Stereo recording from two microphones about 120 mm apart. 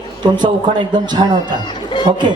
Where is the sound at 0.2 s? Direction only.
40° right (ahead or behind).